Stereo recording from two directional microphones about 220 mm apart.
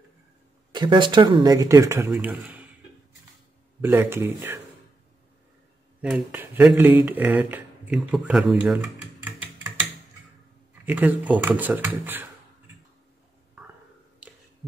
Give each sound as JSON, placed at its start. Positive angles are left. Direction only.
{"t": 0.7, "sound": "speech", "side_deg": -20}
{"t": 3.8, "sound": "speech", "side_deg": -10}
{"t": 5.9, "sound": "speech", "side_deg": -5}
{"t": 8.6, "sound": "typing", "side_deg": -10}
{"t": 10.9, "sound": "speech", "side_deg": -10}